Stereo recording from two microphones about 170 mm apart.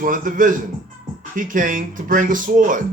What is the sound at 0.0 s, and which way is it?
Speech, 50° right (ahead or behind).